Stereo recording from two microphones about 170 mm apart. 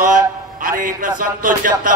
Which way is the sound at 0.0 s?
55° right (ahead or behind).